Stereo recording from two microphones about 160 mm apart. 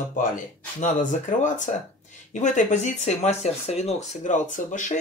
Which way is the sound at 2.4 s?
50° left (ahead or behind).